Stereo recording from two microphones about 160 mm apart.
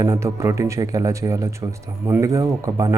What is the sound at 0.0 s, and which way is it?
A man's voice, 20° right (ahead or behind).